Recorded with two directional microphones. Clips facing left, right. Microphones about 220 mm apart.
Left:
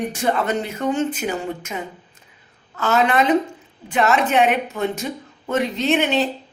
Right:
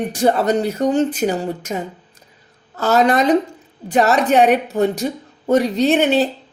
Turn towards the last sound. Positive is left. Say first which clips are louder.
# right 4 dB
turn(degrees=-35)  # may be behind; listen again after turning